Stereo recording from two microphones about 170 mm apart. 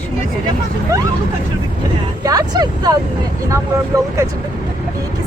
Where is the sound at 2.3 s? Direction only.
20° right (ahead or behind).